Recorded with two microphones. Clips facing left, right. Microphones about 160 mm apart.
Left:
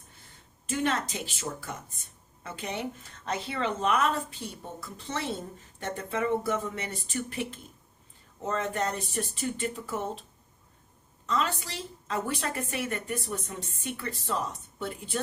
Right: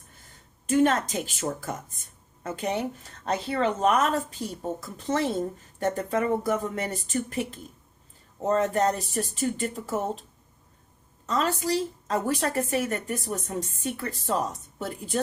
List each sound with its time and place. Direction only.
0.7 s a woman's voice: 45° right (ahead or behind)
11.3 s a woman's voice: 40° right (ahead or behind)